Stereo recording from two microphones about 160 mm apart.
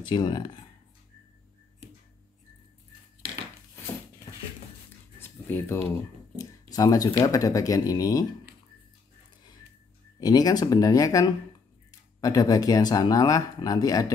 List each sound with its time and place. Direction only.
0.1 s speech: 25° left (ahead or behind)
5.2 s a sound: 15° left (ahead or behind)
6.7 s speech: 25° left (ahead or behind)
10.2 s speech: 25° left (ahead or behind)